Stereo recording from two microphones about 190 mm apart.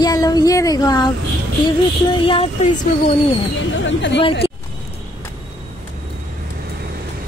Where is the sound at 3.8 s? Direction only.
70° left (ahead or behind).